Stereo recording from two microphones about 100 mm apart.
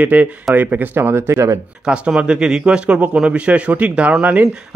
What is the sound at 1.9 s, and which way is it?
Speech, 10° right (ahead or behind).